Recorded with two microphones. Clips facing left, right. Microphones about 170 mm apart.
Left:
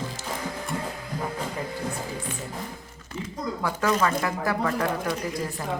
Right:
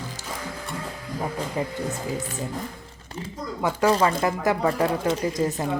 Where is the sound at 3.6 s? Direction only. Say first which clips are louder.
Right 4 dB; 30° right (ahead or behind).